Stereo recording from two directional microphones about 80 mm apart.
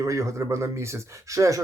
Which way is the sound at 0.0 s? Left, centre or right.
Right.